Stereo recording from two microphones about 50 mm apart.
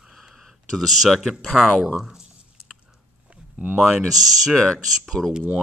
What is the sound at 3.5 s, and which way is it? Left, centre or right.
Speech, right.